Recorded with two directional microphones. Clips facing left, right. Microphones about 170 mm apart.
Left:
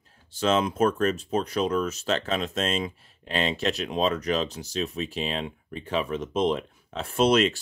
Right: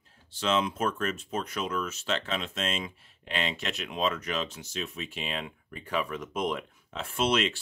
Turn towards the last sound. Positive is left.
turn(degrees=40)  # may be behind; listen again after turning